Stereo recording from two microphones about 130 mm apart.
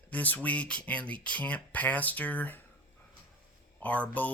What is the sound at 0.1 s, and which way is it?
Speech, 10° left (ahead or behind).